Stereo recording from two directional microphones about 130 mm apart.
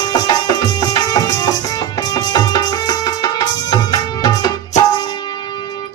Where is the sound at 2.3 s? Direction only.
30° left (ahead or behind).